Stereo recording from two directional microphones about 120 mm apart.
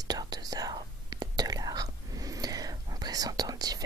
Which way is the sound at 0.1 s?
35° right (ahead or behind).